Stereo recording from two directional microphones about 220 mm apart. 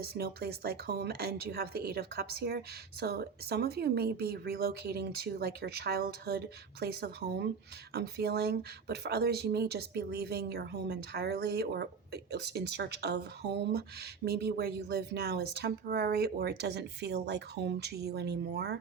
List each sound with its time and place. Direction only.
0.0 s speech: 45° right (ahead or behind)